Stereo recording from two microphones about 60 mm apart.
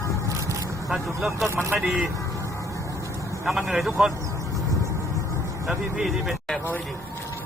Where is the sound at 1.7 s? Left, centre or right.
Centre.